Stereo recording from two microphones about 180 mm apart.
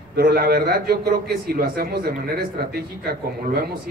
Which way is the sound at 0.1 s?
55° right (ahead or behind).